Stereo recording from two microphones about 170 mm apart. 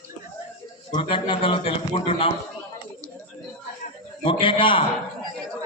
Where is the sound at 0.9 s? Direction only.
30° left (ahead or behind).